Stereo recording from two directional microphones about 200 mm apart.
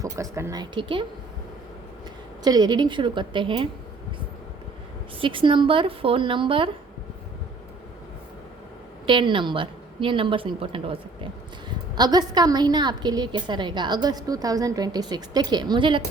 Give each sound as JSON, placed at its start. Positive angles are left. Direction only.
{"t": 0.0, "sound": "a woman's voice", "side_deg": -15}
{"t": 2.4, "sound": "a woman's voice", "side_deg": -20}
{"t": 5.2, "sound": "a woman's voice", "side_deg": -25}
{"t": 9.0, "sound": "a woman's voice", "side_deg": -25}